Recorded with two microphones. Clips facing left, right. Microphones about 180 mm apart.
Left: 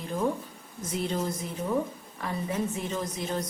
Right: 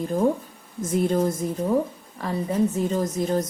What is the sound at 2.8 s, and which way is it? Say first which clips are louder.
Speech: right 8 dB; 45° right (ahead or behind).